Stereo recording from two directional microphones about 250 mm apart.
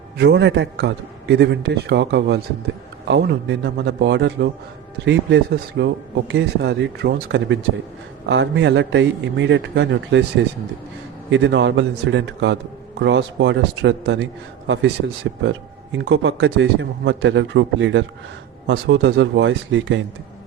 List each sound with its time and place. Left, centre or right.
0.2 s speech: right
11.3 s speech: right